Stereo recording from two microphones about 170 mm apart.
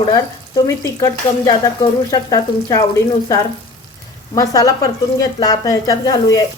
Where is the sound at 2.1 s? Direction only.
20° left (ahead or behind).